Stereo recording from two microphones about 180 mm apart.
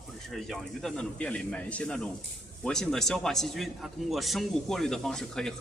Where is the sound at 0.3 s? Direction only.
Centre (ahead or behind).